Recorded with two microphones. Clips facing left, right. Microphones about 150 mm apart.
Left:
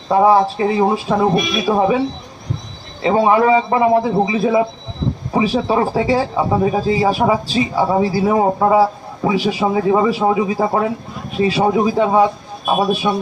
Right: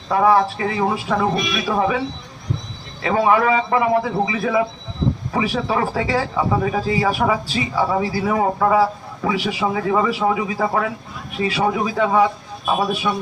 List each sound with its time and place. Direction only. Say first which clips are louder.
0.1 s speech: left 3 dB; 25° left (ahead or behind)
3.0 s speech: left 4 dB; 25° left (ahead or behind)